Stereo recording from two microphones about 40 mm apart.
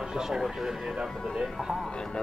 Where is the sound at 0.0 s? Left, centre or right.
Centre.